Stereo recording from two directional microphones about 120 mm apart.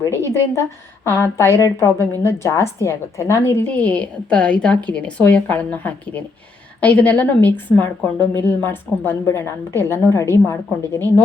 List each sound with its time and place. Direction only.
0.0 s a woman's voice: 25° left (ahead or behind)